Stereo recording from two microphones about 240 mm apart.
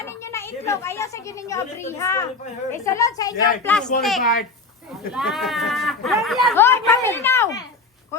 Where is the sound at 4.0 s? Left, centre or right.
Centre.